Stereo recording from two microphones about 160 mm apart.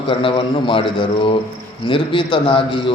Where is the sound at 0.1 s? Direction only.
30° left (ahead or behind).